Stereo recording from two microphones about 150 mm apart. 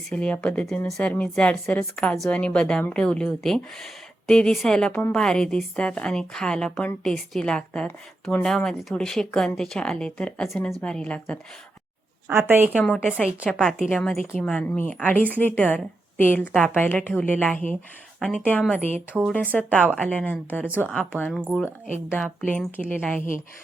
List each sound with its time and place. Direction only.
0.1 s speech: 5° left (ahead or behind)
12.3 s a woman's voice: 15° right (ahead or behind)
12.8 s speech: 5° left (ahead or behind)